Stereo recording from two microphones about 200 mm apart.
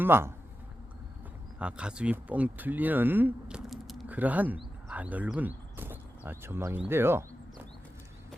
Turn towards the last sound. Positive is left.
turn(degrees=-10)  # may be behind; listen again after turning